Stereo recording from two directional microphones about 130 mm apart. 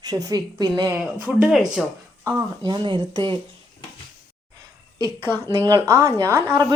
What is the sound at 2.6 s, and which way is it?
Speech, 35° right (ahead or behind).